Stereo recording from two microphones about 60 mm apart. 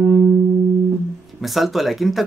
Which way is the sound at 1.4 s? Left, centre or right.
Centre.